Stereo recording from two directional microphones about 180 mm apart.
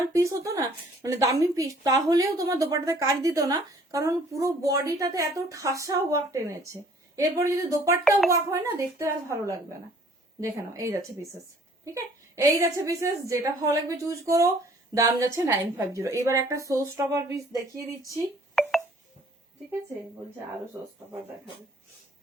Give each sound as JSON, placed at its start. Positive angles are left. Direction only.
{"t": 0.1, "sound": "a woman's voice", "side_deg": -15}